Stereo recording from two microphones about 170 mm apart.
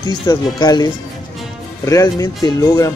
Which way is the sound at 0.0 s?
25° left (ahead or behind).